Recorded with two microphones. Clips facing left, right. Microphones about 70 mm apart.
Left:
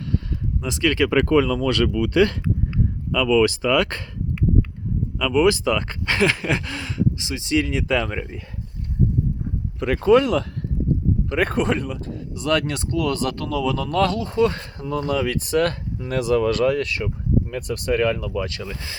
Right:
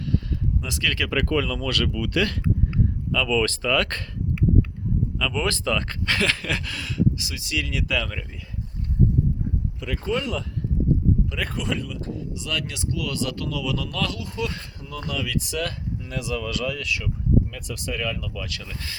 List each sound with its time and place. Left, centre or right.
0.6 s speech: left
3.1 s speech: centre
5.2 s speech: centre
9.8 s speech: left
11.3 s speech: left
18.5 s speech: left